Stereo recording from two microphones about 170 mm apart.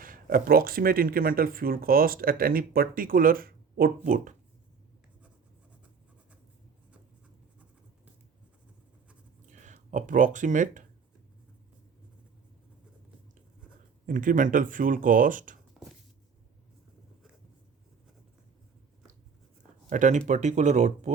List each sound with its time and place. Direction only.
0.0 s speech: 55° right (ahead or behind)
9.5 s speech: 45° right (ahead or behind)
14.1 s speech: 50° right (ahead or behind)
15.8 s a sound: centre (ahead or behind)
19.9 s speech: 45° right (ahead or behind)